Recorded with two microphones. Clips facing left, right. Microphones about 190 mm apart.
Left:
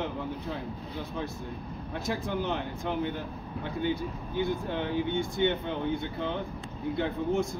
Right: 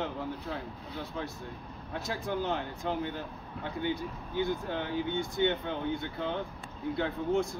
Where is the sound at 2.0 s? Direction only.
20° left (ahead or behind).